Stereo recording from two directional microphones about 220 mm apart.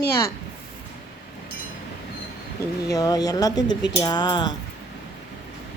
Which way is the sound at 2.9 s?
15° left (ahead or behind).